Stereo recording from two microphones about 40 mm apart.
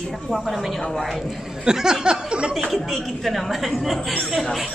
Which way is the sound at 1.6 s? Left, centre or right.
Centre.